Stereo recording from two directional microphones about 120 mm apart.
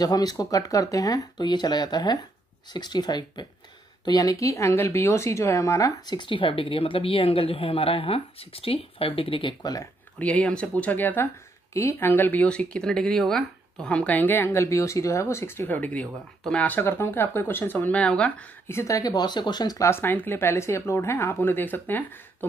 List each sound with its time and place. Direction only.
0.0 s speech: 35° left (ahead or behind)
10.1 s speech: 10° left (ahead or behind)
18.7 s speech: 25° left (ahead or behind)
19.9 s speech: 20° left (ahead or behind)